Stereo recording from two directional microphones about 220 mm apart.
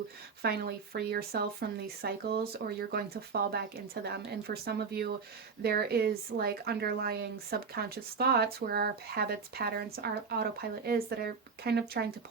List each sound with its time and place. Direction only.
0.4 s a woman's voice: 45° right (ahead or behind)